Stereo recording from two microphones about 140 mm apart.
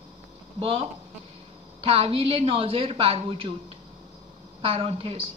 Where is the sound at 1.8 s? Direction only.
45° right (ahead or behind).